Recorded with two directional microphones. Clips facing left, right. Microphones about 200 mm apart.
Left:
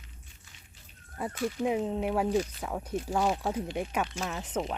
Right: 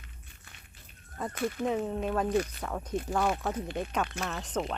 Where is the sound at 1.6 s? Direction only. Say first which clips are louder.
Left 2 dB; 15° left (ahead or behind).